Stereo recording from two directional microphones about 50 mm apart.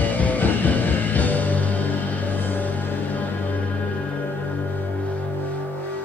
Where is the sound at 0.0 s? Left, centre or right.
Left.